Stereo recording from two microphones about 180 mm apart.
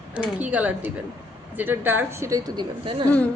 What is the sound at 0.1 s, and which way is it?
A woman's voice, 5° right (ahead or behind).